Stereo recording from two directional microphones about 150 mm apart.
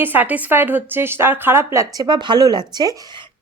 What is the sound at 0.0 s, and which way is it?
A woman's voice, 10° right (ahead or behind).